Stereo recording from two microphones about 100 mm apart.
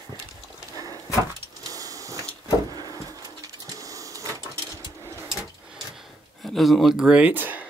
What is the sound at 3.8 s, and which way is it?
Printer, 35° right (ahead or behind).